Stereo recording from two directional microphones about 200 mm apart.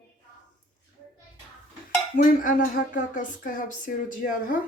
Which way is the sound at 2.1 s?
40° left (ahead or behind).